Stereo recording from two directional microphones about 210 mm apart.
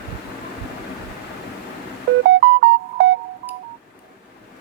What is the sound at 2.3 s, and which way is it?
Music, 55° right (ahead or behind).